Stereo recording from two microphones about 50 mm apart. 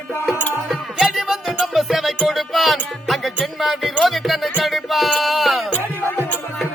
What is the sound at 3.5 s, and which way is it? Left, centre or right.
Speech, centre.